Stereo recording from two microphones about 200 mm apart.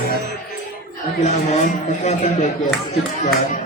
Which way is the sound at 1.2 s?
35° left (ahead or behind).